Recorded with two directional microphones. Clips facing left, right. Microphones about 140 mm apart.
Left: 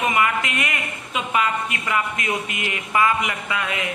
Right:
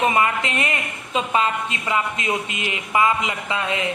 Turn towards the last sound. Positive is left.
turn(degrees=-25)  # may be behind; listen again after turning